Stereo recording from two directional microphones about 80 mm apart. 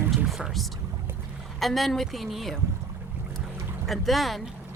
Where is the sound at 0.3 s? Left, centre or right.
Centre.